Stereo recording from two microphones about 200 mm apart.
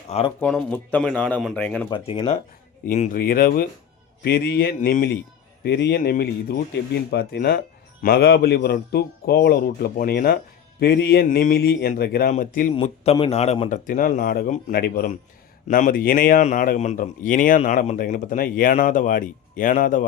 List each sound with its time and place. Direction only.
0.1 s speech: 30° left (ahead or behind)
0.3 s speech: 5° left (ahead or behind)
1.9 s a man's voice: 25° left (ahead or behind); by 5.1 s 45° left (ahead or behind)
5.6 s a man's voice: 55° left (ahead or behind); by 12.7 s 40° left (ahead or behind)
12.7 s a man's voice: 30° left (ahead or behind)